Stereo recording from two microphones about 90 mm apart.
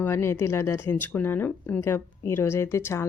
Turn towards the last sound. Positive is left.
turn(degrees=30)  # may be behind; listen again after turning